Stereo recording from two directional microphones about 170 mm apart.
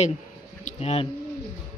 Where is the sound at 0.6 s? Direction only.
35° left (ahead or behind).